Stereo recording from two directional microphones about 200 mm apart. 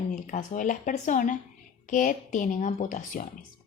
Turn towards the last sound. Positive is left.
turn(degrees=40)  # may be behind; listen again after turning